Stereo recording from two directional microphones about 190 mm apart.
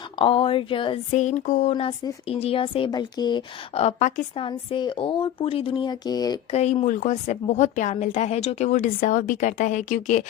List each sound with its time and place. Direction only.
0.2 s a woman's voice: 30° left (ahead or behind)
1.1 s a woman's voice: 40° left (ahead or behind)
4.4 s a woman's voice: 25° left (ahead or behind)
6.5 s a woman's voice: 35° left (ahead or behind)